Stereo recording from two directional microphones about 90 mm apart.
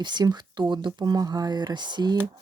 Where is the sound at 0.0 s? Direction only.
50° right (ahead or behind).